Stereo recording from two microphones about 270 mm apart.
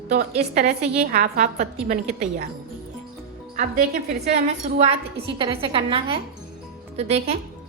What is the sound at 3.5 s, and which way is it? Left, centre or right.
A woman's voice, right.